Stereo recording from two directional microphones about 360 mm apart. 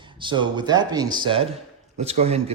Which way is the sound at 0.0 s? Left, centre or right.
Centre.